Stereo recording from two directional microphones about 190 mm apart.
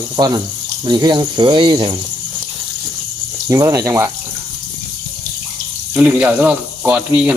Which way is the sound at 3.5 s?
15° right (ahead or behind).